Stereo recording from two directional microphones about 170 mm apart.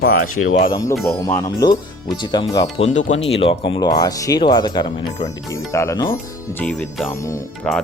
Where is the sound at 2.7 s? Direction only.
40° left (ahead or behind); by 6.1 s 20° left (ahead or behind).